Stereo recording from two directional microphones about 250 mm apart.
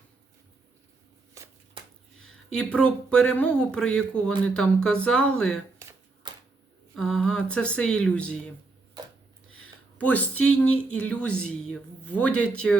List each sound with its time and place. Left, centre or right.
2.6 s speech: centre
6.3 s a sound: centre
6.9 s speech: centre
10.0 s speech: centre